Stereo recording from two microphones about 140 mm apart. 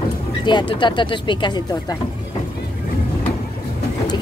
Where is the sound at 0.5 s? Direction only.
35° left (ahead or behind).